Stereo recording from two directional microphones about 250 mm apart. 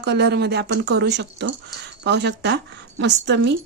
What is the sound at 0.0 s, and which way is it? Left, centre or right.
Speech, right.